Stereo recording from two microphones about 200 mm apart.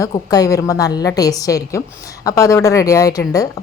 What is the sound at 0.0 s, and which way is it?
A woman's voice, 20° left (ahead or behind).